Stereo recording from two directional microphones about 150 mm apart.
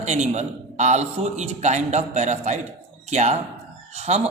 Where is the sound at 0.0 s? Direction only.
50° right (ahead or behind).